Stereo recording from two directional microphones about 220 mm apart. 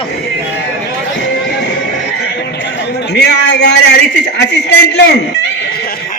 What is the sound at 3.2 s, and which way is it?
Speech, 50° left (ahead or behind).